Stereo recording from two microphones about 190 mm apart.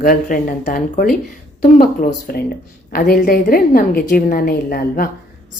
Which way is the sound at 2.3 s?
50° left (ahead or behind).